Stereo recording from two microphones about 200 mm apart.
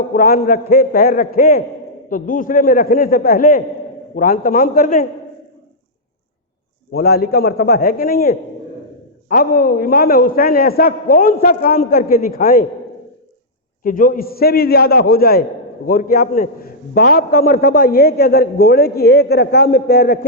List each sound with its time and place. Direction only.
0.1 s a man's voice: 45° left (ahead or behind)
6.9 s a man's voice: 50° left (ahead or behind)
13.8 s a man's voice: 45° left (ahead or behind)